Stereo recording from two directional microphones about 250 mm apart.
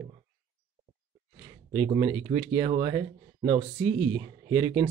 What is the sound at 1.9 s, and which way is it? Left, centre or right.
Speech, centre.